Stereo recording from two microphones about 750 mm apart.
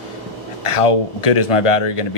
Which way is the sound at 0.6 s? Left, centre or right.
Left.